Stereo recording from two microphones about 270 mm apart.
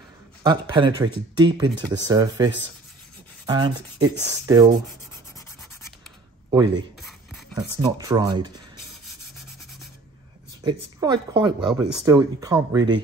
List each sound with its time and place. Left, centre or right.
0.4 s speech: centre
6.5 s speech: centre
7.0 s a sound: centre
7.5 s speech: centre
10.6 s speech: centre